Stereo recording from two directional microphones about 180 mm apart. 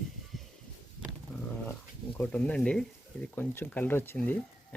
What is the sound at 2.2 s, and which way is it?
Speech, 5° left (ahead or behind).